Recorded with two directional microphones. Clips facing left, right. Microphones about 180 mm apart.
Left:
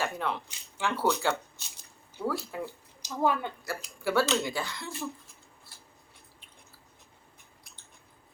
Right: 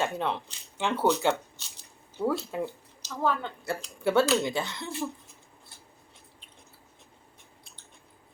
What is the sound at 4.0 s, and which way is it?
Speech, 25° right (ahead or behind).